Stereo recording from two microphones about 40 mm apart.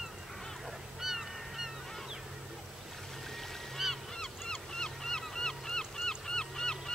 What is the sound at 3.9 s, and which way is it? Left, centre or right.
Honk, centre.